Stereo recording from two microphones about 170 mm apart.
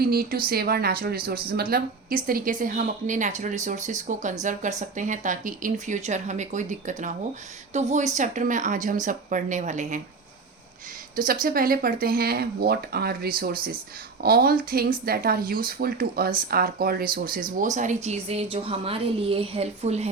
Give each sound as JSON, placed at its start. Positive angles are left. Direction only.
{"t": 0.0, "sound": "a woman's voice", "side_deg": -60}
{"t": 11.2, "sound": "speech", "side_deg": -55}